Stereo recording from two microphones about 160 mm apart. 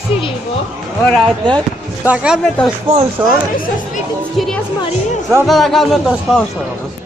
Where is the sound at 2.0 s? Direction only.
5° right (ahead or behind).